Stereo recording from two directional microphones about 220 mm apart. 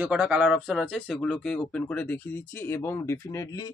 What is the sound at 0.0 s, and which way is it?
Speech, 5° right (ahead or behind).